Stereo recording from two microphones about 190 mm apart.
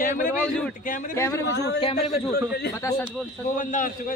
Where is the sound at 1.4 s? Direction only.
65° left (ahead or behind).